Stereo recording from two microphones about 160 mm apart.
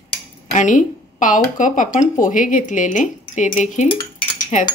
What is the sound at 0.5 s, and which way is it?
Speech, 50° left (ahead or behind).